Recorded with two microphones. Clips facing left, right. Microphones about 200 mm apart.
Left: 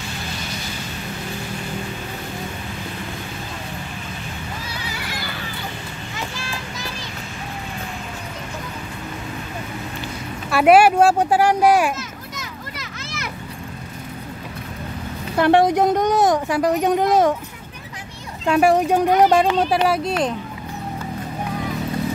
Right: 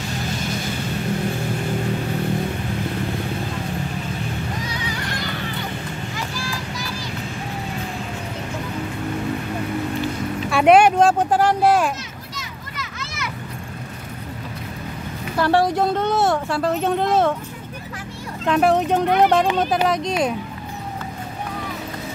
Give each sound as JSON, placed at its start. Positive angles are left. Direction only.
{"t": 4.6, "sound": "neigh", "side_deg": 5}
{"t": 6.3, "sound": "music", "side_deg": 25}
{"t": 10.5, "sound": "speech", "side_deg": 5}
{"t": 15.3, "sound": "speech", "side_deg": 20}
{"t": 18.5, "sound": "speech", "side_deg": 10}